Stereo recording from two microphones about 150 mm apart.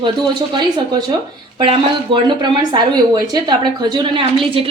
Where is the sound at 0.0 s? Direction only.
30° right (ahead or behind).